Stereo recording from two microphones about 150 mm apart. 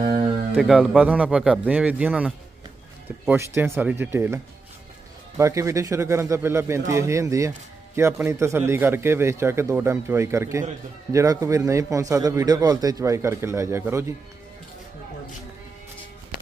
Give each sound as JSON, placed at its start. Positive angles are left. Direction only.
{"t": 0.5, "sound": "a man's voice", "side_deg": -5}
{"t": 5.4, "sound": "a man's voice", "side_deg": -20}